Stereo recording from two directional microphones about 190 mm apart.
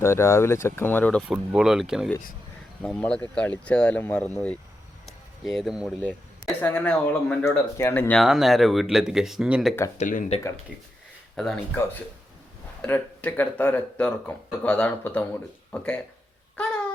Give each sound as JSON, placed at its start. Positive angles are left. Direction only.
{"t": 0.0, "sound": "speech", "side_deg": 15}
{"t": 5.0, "sound": "a sound", "side_deg": 0}
{"t": 6.6, "sound": "speech", "side_deg": 10}
{"t": 8.2, "sound": "speech", "side_deg": 0}
{"t": 10.0, "sound": "speech", "side_deg": 40}
{"t": 11.3, "sound": "speech", "side_deg": 5}
{"t": 12.8, "sound": "speech", "side_deg": 10}